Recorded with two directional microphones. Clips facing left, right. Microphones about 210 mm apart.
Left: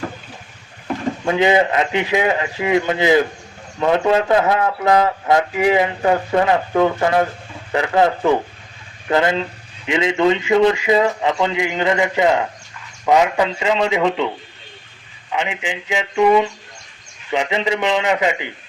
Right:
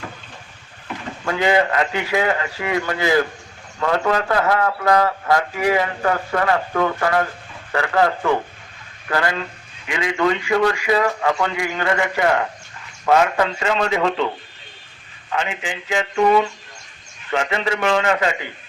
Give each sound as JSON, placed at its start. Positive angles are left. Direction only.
{"t": 1.2, "sound": "speech", "side_deg": 20}
{"t": 15.3, "sound": "speech", "side_deg": 15}